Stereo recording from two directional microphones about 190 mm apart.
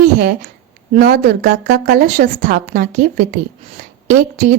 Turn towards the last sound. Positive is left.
turn(degrees=-45)  # may be behind; listen again after turning